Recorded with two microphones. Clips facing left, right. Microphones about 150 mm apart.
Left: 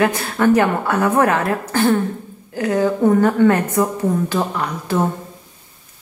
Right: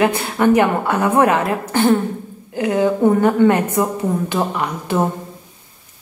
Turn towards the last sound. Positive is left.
turn(degrees=-15)  # may be behind; listen again after turning